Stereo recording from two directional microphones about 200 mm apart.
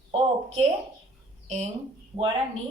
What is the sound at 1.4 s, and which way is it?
Speech, 35° right (ahead or behind).